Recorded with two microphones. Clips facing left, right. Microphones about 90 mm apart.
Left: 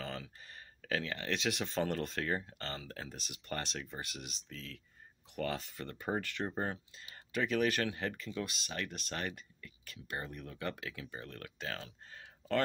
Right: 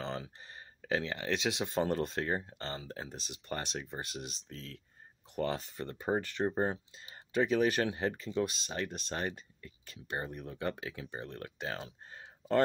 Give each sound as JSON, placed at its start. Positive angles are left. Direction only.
{"t": 0.0, "sound": "speech", "side_deg": -30}